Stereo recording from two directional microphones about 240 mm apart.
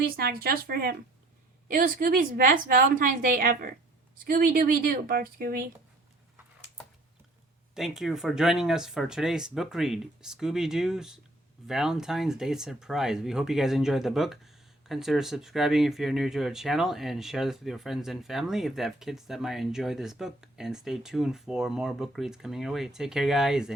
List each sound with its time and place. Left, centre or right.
0.2 s a woman's voice: right
7.8 s speech: centre